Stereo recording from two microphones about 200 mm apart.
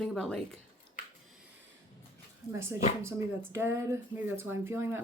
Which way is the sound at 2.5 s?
10° right (ahead or behind).